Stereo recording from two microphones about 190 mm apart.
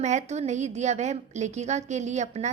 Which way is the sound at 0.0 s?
40° right (ahead or behind).